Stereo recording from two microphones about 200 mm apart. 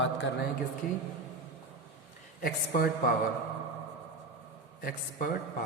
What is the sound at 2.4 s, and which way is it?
Speech, 45° left (ahead or behind).